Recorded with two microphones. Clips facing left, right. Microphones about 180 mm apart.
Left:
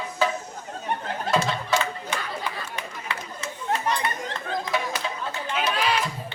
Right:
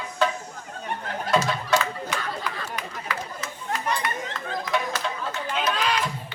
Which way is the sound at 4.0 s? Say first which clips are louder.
Left 1 dB; 30° left (ahead or behind).